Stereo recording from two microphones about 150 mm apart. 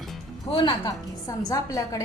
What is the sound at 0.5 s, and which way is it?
A woman's voice, 35° left (ahead or behind).